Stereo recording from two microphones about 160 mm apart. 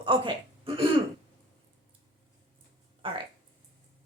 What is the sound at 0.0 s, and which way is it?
Speech, 30° right (ahead or behind).